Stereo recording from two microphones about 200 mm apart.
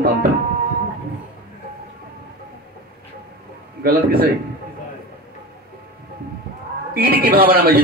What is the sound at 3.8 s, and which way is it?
Speech, 50° right (ahead or behind).